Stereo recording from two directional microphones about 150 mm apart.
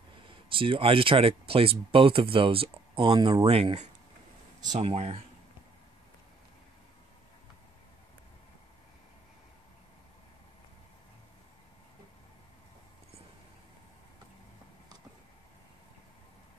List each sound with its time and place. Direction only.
0.3 s speech: 35° right (ahead or behind)